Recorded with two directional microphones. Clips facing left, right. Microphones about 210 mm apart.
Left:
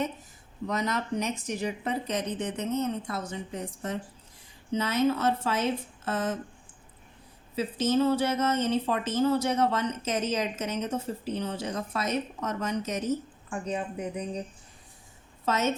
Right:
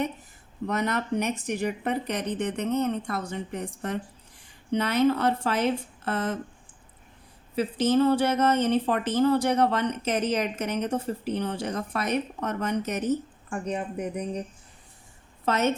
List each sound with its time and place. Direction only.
0.7 s speech: 60° right (ahead or behind)
7.5 s speech: 60° right (ahead or behind)
15.4 s speech: 60° right (ahead or behind)